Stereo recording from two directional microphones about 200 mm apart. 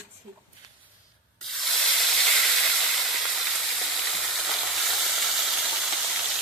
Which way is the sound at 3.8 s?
Centre (ahead or behind).